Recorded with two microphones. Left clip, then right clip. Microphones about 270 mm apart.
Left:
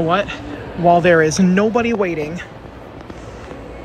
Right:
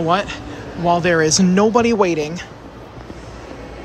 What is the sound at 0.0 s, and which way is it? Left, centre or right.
Speech, centre.